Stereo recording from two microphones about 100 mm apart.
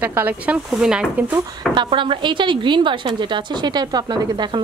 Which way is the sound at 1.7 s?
55° right (ahead or behind).